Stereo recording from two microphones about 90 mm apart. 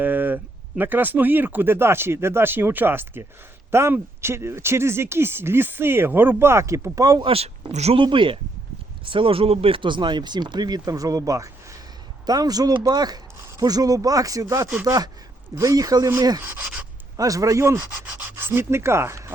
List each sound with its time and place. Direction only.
0.0 s a sound: 20° right (ahead or behind)
0.8 s speech: 20° right (ahead or behind); by 7.3 s 45° right (ahead or behind)
7.9 s speech: 70° right (ahead or behind)
9.0 s speech: 80° right; by 16.0 s 45° right (ahead or behind)
17.2 s speech: 40° right (ahead or behind)